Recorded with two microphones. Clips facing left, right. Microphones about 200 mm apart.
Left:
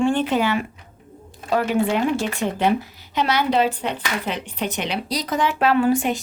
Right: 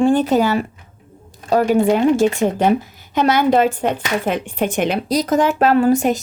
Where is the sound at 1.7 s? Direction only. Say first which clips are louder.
Right 7 dB; 45° right (ahead or behind).